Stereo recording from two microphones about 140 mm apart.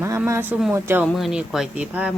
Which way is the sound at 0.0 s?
20° right (ahead or behind).